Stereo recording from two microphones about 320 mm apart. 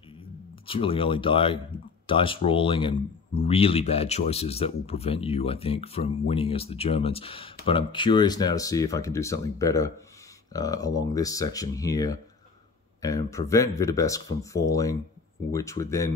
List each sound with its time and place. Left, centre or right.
0.7 s speech: centre